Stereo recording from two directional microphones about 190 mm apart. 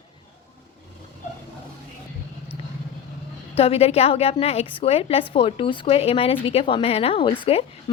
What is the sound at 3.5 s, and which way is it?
A woman's voice, 30° left (ahead or behind).